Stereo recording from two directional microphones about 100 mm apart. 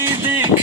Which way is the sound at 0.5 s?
90° left.